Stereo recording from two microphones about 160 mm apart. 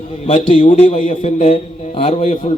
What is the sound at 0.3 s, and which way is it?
A man's voice, 35° left (ahead or behind).